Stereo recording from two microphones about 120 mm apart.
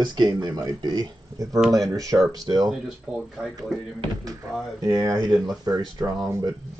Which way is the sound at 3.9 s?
30° right (ahead or behind).